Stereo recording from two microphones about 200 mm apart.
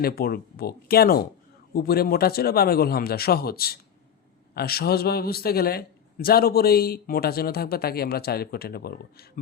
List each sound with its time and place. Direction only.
0.0 s a man's voice: 50° left (ahead or behind)